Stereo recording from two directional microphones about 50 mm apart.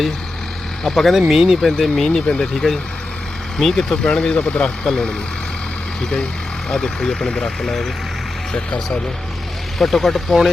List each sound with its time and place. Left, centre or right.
0.9 s speech: centre
1.3 s speech: centre
1.6 s speech: centre; by 4.9 s left
4.9 s speech: centre
6.7 s speech: centre
8.5 s speech: centre
9.7 s speech: centre